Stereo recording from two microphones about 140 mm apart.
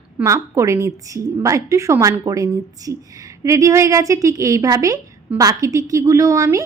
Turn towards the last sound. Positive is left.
turn(degrees=-25)  # may be behind; listen again after turning